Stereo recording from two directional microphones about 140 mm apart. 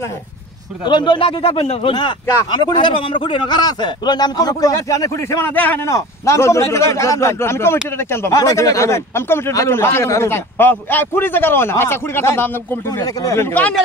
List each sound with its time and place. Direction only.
0.8 s speech: 35° left (ahead or behind)
2.0 s a man's voice: 30° left (ahead or behind); by 13.7 s 10° left (ahead or behind)